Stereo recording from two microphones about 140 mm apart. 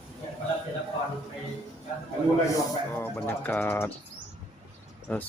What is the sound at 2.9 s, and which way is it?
Speech, 15° left (ahead or behind).